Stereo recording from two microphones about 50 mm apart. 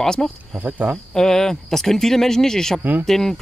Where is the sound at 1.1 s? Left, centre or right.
Centre.